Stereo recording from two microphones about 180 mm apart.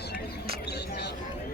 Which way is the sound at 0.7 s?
65° left (ahead or behind).